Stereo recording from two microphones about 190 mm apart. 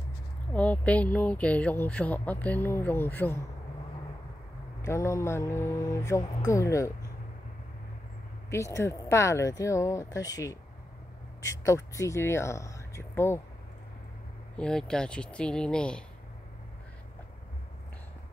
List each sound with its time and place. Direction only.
0.5 s speech: 5° left (ahead or behind)
4.8 s speech: 15° left (ahead or behind)
8.5 s speech: 15° left (ahead or behind)
14.6 s speech: 5° left (ahead or behind)